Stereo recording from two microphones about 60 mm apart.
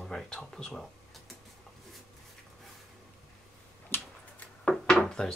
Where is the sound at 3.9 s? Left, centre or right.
Left.